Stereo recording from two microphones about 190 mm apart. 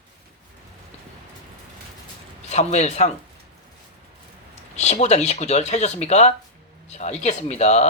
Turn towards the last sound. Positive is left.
turn(degrees=35)  # may be behind; listen again after turning